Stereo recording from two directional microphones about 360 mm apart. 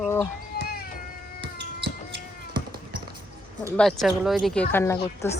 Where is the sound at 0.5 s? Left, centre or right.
Left.